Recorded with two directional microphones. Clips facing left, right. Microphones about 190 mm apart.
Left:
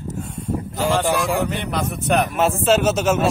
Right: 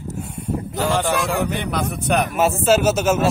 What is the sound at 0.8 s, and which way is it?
A man's voice, centre (ahead or behind).